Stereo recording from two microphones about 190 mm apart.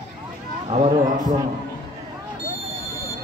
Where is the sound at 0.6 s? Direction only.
30° right (ahead or behind).